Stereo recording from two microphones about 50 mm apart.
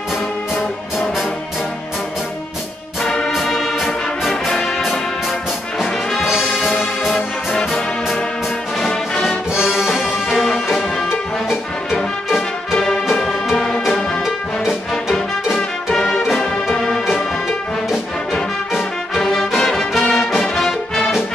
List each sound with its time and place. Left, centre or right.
3.1 s brass instrument: centre
3.7 s music: centre
6.0 s music: centre
7.1 s music: centre
9.5 s music: centre
11.1 s music: centre
13.1 s music: centre
14.2 s music: centre
15.9 s music: centre
18.8 s music: centre
20.0 s music: centre
20.3 s music: centre